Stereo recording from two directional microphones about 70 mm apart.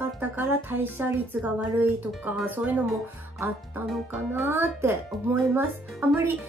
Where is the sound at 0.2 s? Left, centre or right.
Right.